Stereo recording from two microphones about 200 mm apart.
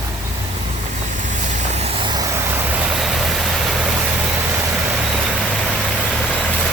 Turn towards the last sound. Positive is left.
turn(degrees=0)  # may be behind; listen again after turning